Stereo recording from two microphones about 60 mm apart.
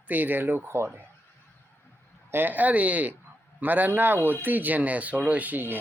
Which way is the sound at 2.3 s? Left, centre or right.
Right.